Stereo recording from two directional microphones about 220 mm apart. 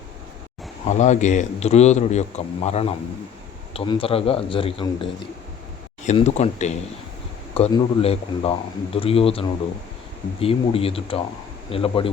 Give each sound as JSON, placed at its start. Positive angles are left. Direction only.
{"t": 0.9, "sound": "a man's voice", "side_deg": 30}
{"t": 6.1, "sound": "a man's voice", "side_deg": 30}